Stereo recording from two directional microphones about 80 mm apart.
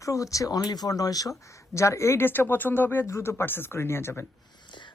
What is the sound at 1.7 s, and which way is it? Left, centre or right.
Speech, left.